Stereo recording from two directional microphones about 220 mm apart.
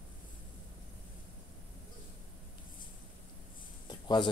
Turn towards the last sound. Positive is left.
turn(degrees=20)  # may be behind; listen again after turning